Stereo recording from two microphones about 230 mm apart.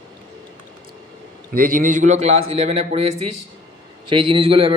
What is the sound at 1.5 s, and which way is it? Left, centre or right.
A man's voice, right.